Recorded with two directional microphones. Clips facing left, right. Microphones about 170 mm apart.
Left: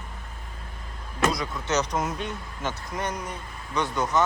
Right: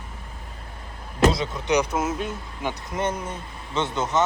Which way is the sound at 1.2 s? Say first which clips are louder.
Right 5 dB; 25° right (ahead or behind).